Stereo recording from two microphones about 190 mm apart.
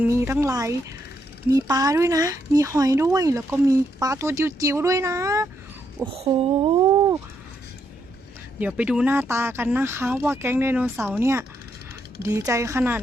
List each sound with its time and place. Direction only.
0.0 s speech: 10° right (ahead or behind)
6.2 s a sound: 25° right (ahead or behind)
8.5 s speech: 5° right (ahead or behind)